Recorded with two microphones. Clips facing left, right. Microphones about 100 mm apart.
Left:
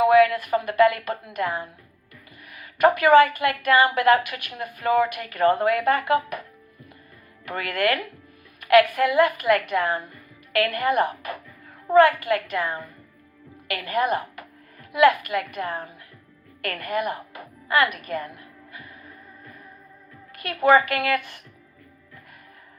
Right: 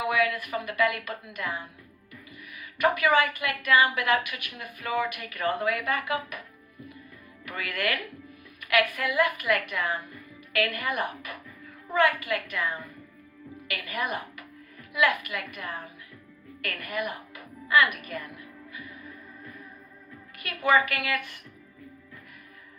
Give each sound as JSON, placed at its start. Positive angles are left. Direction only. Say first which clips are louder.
{"t": 0.0, "sound": "a woman's voice", "louder": "left 10 dB", "side_deg": 40}
{"t": 7.4, "sound": "a woman's voice", "louder": "left 7 dB", "side_deg": 40}
{"t": 20.3, "sound": "a woman's voice", "louder": "left 6 dB", "side_deg": 40}